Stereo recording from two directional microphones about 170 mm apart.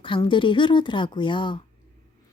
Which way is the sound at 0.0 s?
30° left (ahead or behind).